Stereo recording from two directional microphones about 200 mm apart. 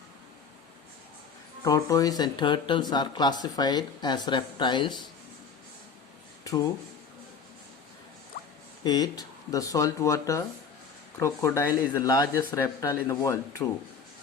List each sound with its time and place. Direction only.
1.6 s speech: 15° left (ahead or behind)
6.4 s a sound: 15° left (ahead or behind)
8.8 s speech: 20° left (ahead or behind)